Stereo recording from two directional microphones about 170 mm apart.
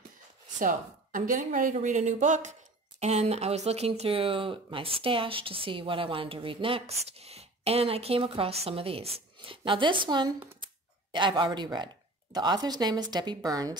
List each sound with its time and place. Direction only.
0.6 s speech: 50° right (ahead or behind); by 13.7 s 20° right (ahead or behind)